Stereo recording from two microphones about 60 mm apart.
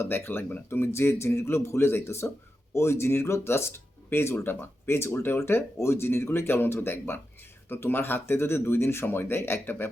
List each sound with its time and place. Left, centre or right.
0.0 s speech: left